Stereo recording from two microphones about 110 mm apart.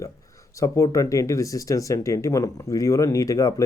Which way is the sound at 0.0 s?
30° left (ahead or behind).